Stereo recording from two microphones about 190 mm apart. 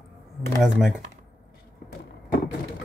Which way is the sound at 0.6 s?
5° right (ahead or behind).